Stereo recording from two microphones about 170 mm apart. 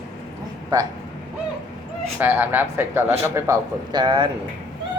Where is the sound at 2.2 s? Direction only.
10° right (ahead or behind); by 4.3 s 25° right (ahead or behind).